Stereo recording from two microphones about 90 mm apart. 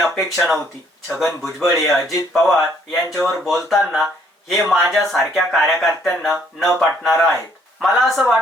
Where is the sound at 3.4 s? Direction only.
Centre (ahead or behind).